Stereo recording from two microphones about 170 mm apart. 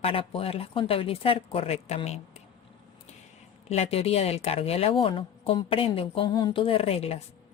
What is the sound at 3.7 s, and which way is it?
Speech, 35° left (ahead or behind).